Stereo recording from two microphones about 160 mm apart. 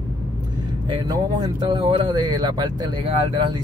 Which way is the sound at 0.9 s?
25° right (ahead or behind).